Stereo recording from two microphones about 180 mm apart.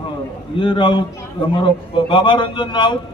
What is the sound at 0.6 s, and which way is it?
A man's voice, 30° left (ahead or behind).